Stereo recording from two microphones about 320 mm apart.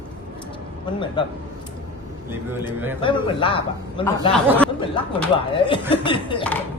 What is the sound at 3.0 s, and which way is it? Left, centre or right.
A man's voice, centre.